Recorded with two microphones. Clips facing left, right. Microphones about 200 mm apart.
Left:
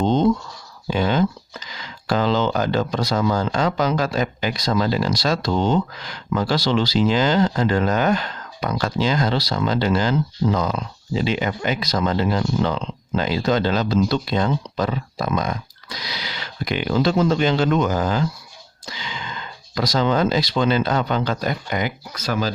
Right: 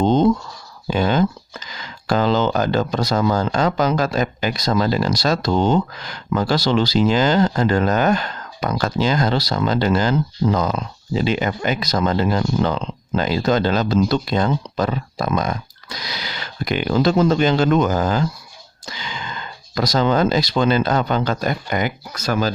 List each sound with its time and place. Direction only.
0.0 s scratch: 45° right (ahead or behind)
0.9 s speech: 45° right (ahead or behind)